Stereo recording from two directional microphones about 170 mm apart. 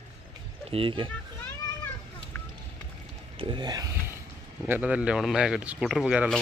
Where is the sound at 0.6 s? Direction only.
30° right (ahead or behind).